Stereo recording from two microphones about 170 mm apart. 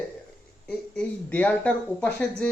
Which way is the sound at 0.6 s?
10° left (ahead or behind).